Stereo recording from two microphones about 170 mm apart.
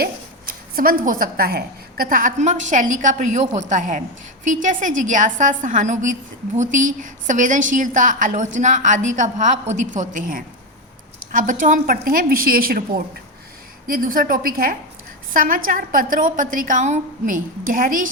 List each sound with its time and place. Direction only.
0.0 s a woman's voice: 60° right (ahead or behind)